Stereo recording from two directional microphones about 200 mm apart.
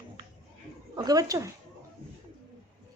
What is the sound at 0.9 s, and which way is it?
Speech, 20° right (ahead or behind).